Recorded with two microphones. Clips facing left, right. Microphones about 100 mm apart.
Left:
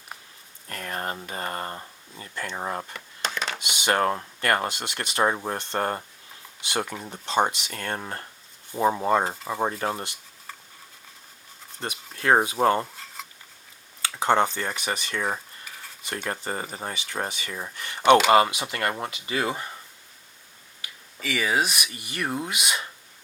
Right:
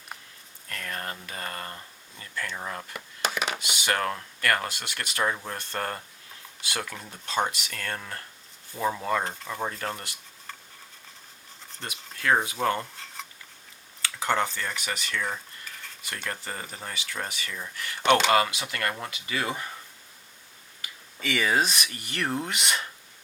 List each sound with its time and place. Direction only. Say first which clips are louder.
0.7 s speech: left 4 dB; 30° left (ahead or behind)
2.9 s a sound: right 1 dB; 10° right (ahead or behind)
3.6 s speech: left 8 dB; 20° left (ahead or behind)
12.1 s speech: left 4 dB; 25° left (ahead or behind)
14.0 s speech: left 5 dB; 25° left (ahead or behind)
21.2 s speech: even; 5° left (ahead or behind)